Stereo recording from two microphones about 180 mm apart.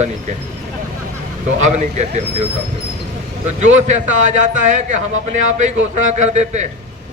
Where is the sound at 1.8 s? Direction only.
40° right (ahead or behind).